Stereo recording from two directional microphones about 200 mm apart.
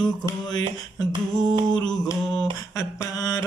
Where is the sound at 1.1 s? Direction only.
25° right (ahead or behind).